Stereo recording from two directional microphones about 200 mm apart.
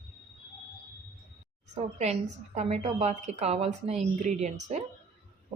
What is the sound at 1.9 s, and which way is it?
Speech, 35° right (ahead or behind).